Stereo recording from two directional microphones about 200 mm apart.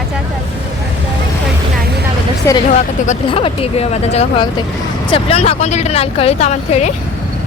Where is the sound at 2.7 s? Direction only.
35° left (ahead or behind).